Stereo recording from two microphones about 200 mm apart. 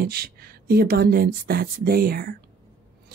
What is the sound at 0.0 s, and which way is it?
Speech, 50° right (ahead or behind).